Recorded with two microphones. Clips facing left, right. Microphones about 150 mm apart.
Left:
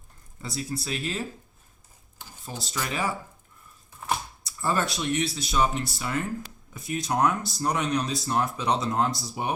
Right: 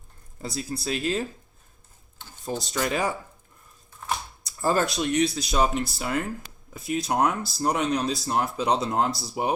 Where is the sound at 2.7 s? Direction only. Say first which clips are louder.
Right 3 dB; 40° right (ahead or behind).